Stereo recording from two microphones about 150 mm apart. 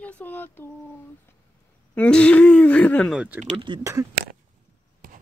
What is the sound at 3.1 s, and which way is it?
Speech, 10° right (ahead or behind).